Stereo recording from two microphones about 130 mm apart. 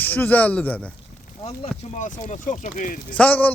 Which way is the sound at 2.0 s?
70° left (ahead or behind).